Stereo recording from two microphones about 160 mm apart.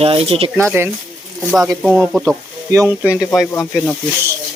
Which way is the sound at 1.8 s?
Centre (ahead or behind).